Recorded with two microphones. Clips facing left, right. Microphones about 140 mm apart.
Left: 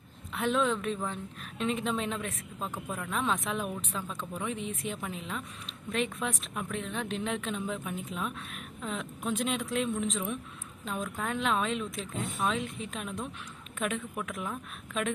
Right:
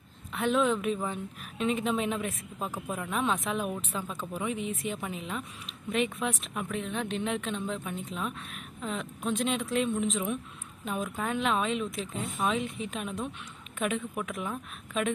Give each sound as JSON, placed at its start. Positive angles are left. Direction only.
{"t": 0.3, "sound": "a woman's voice", "side_deg": 0}